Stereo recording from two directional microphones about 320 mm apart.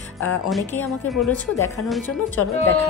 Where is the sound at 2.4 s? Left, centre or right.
Left.